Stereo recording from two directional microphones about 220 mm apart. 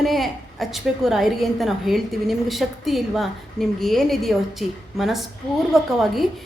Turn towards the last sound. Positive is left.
turn(degrees=0)  # may be behind; listen again after turning